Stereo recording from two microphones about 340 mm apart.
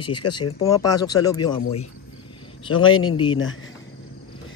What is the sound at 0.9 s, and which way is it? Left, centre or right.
Speech, centre.